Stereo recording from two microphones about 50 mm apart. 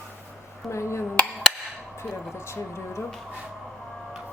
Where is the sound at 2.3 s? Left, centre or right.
Left.